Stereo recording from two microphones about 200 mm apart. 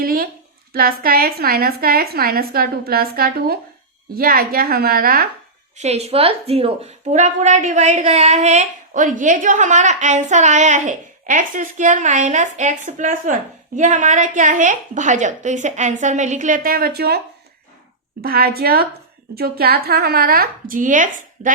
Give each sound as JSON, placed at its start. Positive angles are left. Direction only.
{"t": 0.0, "sound": "a sound", "side_deg": -45}
{"t": 0.7, "sound": "a woman's voice", "side_deg": -50}
{"t": 5.7, "sound": "a woman's voice", "side_deg": -35}
{"t": 18.2, "sound": "a woman's voice", "side_deg": -50}